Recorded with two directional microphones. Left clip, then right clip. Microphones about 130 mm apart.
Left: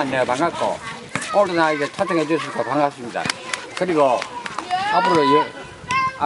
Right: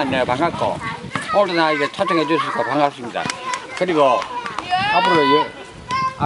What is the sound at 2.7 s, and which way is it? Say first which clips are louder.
Speech: right 2 dB; 5° right (ahead or behind).